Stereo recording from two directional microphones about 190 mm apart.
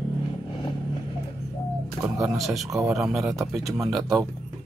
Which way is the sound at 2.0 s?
10° right (ahead or behind).